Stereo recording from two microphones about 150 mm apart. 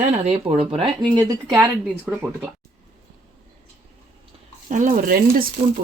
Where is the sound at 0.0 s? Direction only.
40° right (ahead or behind); by 1.4 s 25° right (ahead or behind).